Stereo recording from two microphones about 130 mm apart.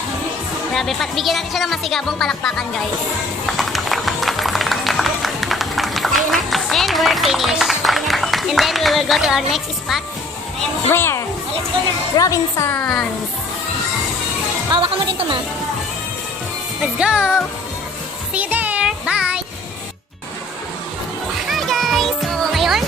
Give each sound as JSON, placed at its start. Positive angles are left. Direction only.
{"t": 0.7, "sound": "speech", "side_deg": 0}
{"t": 3.4, "sound": "music", "side_deg": 0}
{"t": 10.9, "sound": "speech", "side_deg": 20}
{"t": 12.7, "sound": "speech", "side_deg": 10}
{"t": 14.7, "sound": "speech", "side_deg": -40}
{"t": 16.8, "sound": "music", "side_deg": -5}
{"t": 18.3, "sound": "child singing", "side_deg": -10}
{"t": 21.5, "sound": "music", "side_deg": 0}